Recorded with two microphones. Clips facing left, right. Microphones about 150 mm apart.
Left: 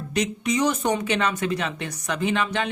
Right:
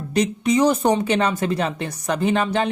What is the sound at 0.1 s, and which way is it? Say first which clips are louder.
Speech: right 5 dB; 30° right (ahead or behind).